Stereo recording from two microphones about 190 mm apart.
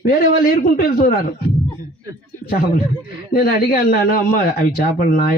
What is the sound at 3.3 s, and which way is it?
Speech, 50° left (ahead or behind).